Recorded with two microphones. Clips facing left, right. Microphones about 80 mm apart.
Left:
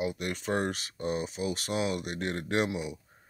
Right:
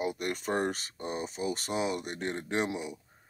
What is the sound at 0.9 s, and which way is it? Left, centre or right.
Speech, right.